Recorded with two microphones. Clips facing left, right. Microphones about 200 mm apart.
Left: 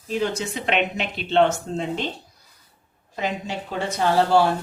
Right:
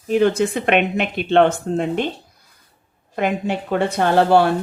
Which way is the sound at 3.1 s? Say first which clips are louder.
Right 7 dB; 55° right (ahead or behind).